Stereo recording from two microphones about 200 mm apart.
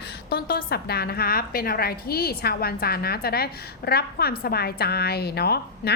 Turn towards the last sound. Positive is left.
turn(degrees=55)  # may be behind; listen again after turning